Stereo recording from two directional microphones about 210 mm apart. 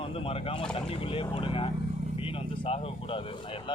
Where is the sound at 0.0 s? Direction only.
25° left (ahead or behind).